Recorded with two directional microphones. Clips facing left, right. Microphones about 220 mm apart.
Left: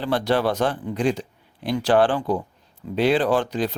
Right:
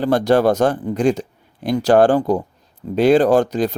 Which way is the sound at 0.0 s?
45° right (ahead or behind).